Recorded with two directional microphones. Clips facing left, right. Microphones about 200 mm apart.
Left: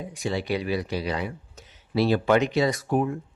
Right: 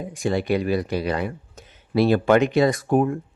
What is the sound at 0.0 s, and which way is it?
Speech, 50° right (ahead or behind).